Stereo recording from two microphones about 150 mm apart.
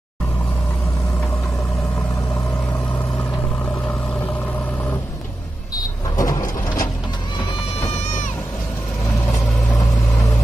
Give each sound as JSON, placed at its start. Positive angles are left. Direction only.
{"t": 6.1, "sound": "vehicle", "side_deg": 25}
{"t": 7.8, "sound": "vehicle", "side_deg": 50}